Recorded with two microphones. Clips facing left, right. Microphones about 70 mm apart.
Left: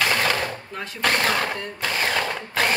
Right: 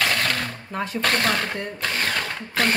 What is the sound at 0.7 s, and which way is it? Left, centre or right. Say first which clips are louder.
Speech: right 5 dB; right.